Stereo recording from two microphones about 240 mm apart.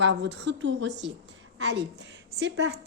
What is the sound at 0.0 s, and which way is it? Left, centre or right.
A woman's voice, right.